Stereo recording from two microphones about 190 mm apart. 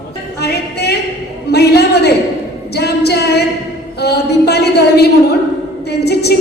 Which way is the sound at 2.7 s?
60° left (ahead or behind).